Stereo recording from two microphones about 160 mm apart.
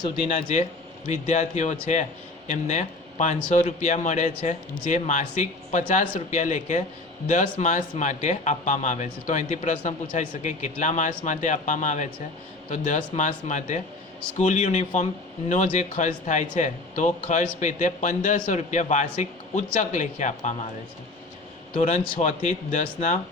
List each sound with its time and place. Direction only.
0.0 s speech: 35° left (ahead or behind)
1.0 s speech: 45° left (ahead or behind)
21.8 s speech: 40° left (ahead or behind)